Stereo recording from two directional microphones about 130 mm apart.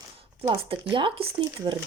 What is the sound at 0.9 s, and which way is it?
Speech, 40° right (ahead or behind).